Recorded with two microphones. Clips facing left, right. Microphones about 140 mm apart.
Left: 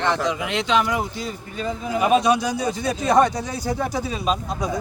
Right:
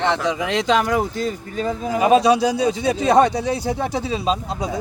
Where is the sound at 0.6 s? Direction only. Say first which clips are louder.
Right 2 dB; 40° right (ahead or behind).